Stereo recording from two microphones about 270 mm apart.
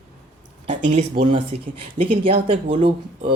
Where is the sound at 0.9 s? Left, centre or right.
Right.